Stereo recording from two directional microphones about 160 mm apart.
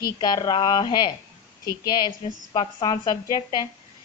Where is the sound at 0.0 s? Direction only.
25° left (ahead or behind).